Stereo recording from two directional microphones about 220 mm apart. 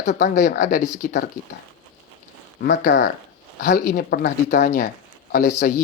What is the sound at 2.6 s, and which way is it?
Speech, 45° left (ahead or behind).